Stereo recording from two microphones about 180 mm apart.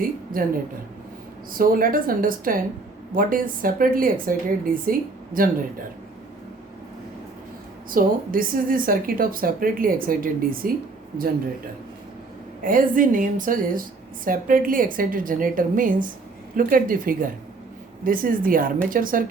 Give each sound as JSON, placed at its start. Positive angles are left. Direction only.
{"t": 0.0, "sound": "a woman's voice", "side_deg": -50}
{"t": 1.5, "sound": "speech", "side_deg": -50}
{"t": 7.9, "sound": "speech", "side_deg": -50}
{"t": 12.6, "sound": "speech", "side_deg": -50}